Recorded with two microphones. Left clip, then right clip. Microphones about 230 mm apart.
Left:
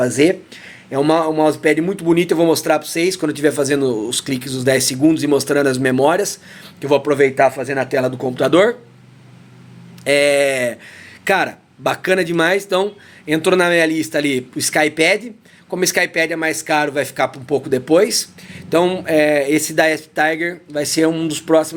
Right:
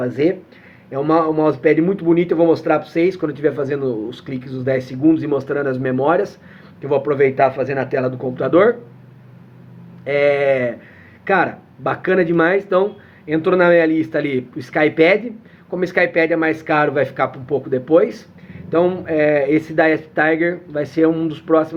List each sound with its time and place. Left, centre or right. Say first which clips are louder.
0.0 s speech: left 4 dB; left
10.0 s speech: left 2 dB; left